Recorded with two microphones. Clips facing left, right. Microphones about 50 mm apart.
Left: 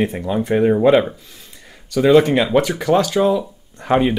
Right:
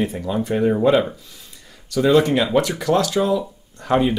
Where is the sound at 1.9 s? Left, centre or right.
Centre.